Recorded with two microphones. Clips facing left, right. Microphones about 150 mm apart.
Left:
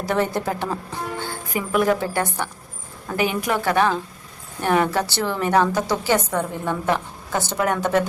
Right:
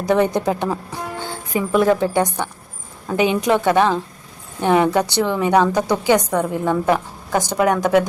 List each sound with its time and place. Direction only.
0.0 s a woman's voice: 15° right (ahead or behind)
1.7 s a woman's voice: centre (ahead or behind)
2.0 s a woman's voice: 20° right (ahead or behind)